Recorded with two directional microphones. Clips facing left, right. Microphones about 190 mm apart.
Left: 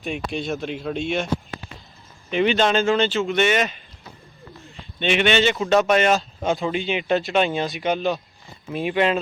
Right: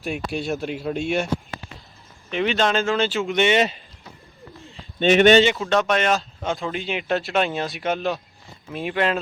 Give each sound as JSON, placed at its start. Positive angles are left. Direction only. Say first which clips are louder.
{"t": 0.0, "sound": "speech", "louder": "even", "side_deg": -5}
{"t": 2.3, "sound": "speech", "louder": "left 2 dB", "side_deg": 0}
{"t": 3.2, "sound": "speech", "louder": "right 1 dB", "side_deg": -15}
{"t": 4.7, "sound": "bird", "louder": "right 5 dB", "side_deg": -40}
{"t": 5.5, "sound": "speech", "louder": "left 3 dB", "side_deg": 5}